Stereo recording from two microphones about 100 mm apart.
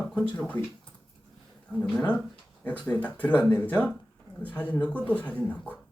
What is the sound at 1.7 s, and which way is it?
Speech, 10° left (ahead or behind).